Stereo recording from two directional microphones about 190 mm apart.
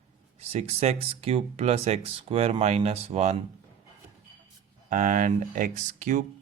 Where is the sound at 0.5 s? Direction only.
30° right (ahead or behind).